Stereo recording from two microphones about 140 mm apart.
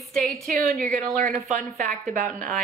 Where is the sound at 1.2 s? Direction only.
60° right (ahead or behind).